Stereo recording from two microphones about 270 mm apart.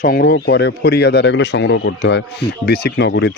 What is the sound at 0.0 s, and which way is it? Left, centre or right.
Speech, left.